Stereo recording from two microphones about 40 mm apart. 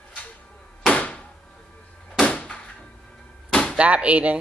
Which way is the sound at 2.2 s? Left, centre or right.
Left.